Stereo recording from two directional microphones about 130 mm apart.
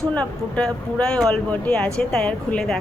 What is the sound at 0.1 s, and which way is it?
Speech, 10° left (ahead or behind).